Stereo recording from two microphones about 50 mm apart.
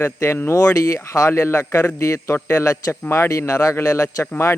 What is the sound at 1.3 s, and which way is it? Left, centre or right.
Speech, left.